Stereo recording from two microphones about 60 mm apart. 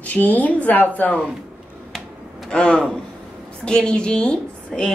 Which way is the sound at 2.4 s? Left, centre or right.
Centre.